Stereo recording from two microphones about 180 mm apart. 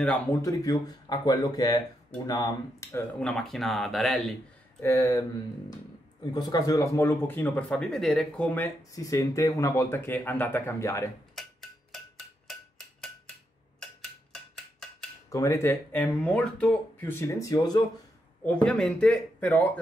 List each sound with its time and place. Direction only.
0.4 s speech: 20° left (ahead or behind)
3.2 s speech: centre (ahead or behind)
4.8 s speech: 15° left (ahead or behind)
6.3 s speech: 20° left (ahead or behind)
11.3 s a sound: centre (ahead or behind)
15.2 s speech: 15° left (ahead or behind)
18.4 s speech: 5° left (ahead or behind)